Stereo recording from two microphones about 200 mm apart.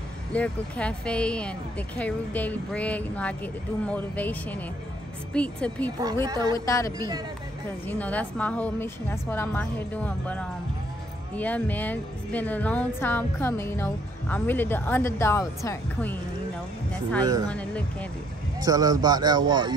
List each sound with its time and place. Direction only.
0.3 s a woman's voice: 5° left (ahead or behind)
6.2 s speech: 20° right (ahead or behind)
6.5 s a woman's voice: 15° left (ahead or behind)
17.5 s a woman's voice: 5° left (ahead or behind)
18.6 s speech: 20° right (ahead or behind)